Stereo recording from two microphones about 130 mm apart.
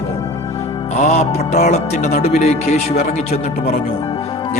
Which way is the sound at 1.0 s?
60° left (ahead or behind).